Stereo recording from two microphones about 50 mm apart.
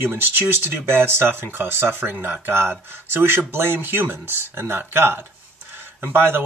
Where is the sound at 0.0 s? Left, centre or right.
Right.